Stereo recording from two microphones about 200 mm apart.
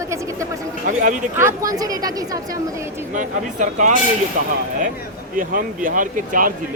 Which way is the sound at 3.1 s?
40° right (ahead or behind).